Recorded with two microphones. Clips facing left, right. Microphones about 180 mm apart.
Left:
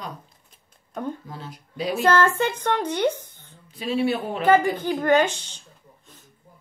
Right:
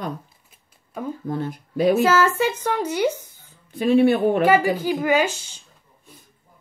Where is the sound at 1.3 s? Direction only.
55° right (ahead or behind).